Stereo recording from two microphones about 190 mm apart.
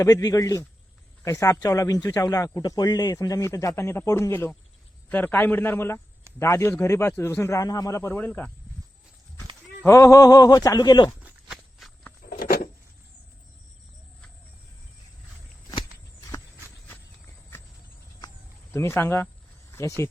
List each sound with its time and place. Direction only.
0.0 s speech: 20° left (ahead or behind)
9.8 s speech: 15° left (ahead or behind)
11.2 s walk: 5° right (ahead or behind)
12.3 s a sound: 50° left (ahead or behind)
18.7 s speech: 15° left (ahead or behind)